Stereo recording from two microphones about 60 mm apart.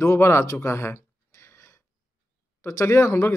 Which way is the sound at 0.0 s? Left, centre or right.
Left.